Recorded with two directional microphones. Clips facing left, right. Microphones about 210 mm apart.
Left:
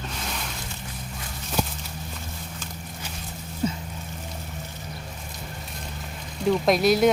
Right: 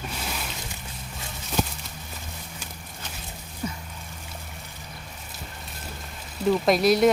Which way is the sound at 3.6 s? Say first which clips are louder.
Left 6 dB; 25° left (ahead or behind).